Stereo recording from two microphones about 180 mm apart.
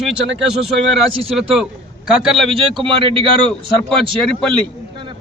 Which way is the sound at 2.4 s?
30° right (ahead or behind).